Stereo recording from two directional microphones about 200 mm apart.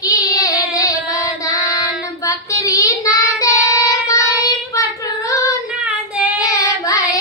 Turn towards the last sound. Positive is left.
turn(degrees=15)  # may be behind; listen again after turning